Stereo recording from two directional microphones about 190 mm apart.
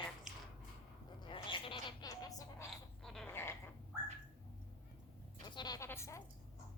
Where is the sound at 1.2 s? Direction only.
25° left (ahead or behind).